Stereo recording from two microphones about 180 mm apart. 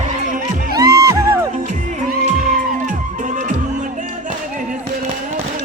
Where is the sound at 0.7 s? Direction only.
20° right (ahead or behind).